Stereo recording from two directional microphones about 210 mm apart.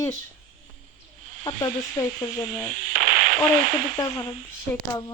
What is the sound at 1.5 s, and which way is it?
Speech, 20° left (ahead or behind).